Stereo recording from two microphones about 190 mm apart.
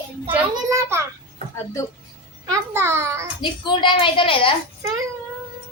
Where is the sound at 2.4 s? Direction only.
15° right (ahead or behind).